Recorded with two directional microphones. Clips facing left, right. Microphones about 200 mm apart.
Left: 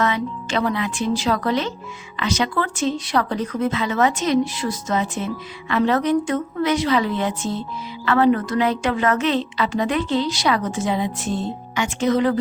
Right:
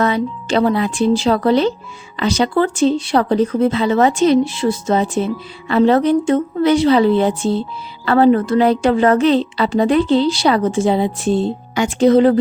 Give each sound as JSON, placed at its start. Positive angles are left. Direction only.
{"t": 0.0, "sound": "speech", "side_deg": -35}